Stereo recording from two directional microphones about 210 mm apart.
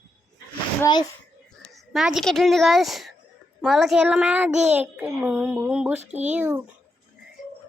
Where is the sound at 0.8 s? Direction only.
20° left (ahead or behind).